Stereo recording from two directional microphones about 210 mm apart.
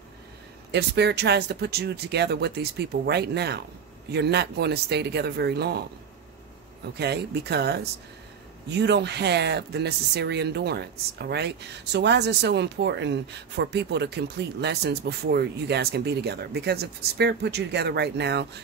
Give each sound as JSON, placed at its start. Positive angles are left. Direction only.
{"t": 0.7, "sound": "speech", "side_deg": -55}
{"t": 7.0, "sound": "speech", "side_deg": -50}